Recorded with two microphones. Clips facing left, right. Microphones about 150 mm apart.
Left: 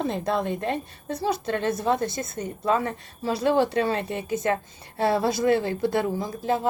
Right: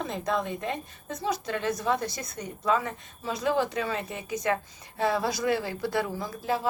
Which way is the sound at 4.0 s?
65° left (ahead or behind).